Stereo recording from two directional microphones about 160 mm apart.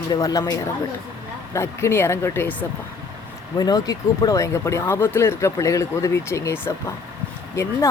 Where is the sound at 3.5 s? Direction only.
25° left (ahead or behind).